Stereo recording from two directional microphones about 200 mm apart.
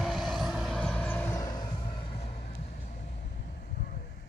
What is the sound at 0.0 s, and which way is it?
Vehicle, centre (ahead or behind).